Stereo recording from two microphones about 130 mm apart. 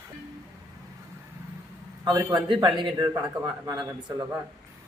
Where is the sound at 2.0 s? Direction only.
30° right (ahead or behind).